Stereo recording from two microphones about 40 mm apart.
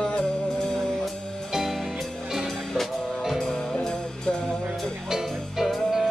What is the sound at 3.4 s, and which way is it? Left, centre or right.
Music, centre.